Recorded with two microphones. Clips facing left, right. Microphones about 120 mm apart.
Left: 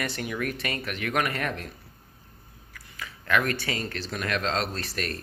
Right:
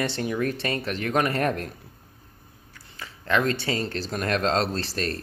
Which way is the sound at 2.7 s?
30° right (ahead or behind).